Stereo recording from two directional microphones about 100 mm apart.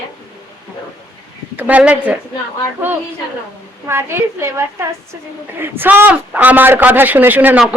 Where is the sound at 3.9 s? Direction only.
25° right (ahead or behind).